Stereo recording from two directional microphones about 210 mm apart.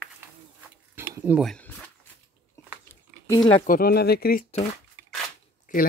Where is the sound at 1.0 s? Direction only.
10° right (ahead or behind).